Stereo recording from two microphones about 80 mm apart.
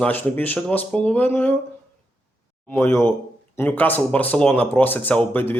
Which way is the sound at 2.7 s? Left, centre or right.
Left.